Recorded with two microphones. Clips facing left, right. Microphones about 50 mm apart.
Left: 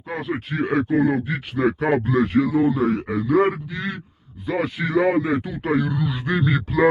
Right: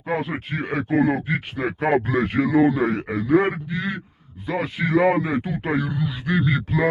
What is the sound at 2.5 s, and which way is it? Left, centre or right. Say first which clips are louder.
Speech: right 1 dB; right.